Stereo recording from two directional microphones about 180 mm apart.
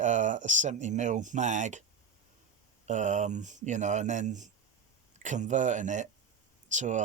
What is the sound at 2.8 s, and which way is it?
Speech, 45° right (ahead or behind).